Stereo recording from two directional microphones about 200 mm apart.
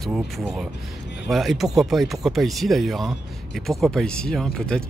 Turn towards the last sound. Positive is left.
turn(degrees=5)  # may be behind; listen again after turning